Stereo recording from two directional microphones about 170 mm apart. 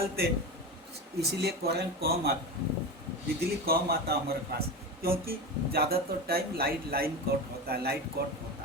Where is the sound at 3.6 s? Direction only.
65° right (ahead or behind).